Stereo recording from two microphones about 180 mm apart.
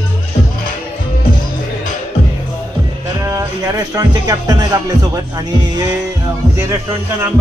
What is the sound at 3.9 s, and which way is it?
Speech, 20° right (ahead or behind).